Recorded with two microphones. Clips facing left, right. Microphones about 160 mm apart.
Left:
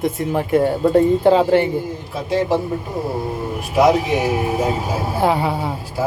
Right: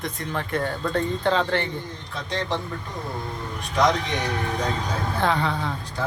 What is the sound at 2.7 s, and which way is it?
Speech, 30° left (ahead or behind).